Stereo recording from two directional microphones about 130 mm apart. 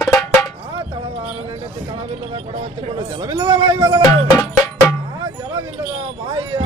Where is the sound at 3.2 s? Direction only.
30° right (ahead or behind).